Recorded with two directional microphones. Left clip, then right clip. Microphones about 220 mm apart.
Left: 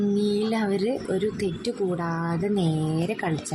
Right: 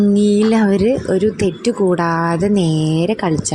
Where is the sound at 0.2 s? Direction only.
30° right (ahead or behind).